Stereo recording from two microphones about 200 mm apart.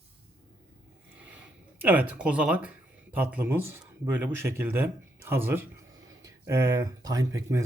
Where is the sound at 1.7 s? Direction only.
10° right (ahead or behind).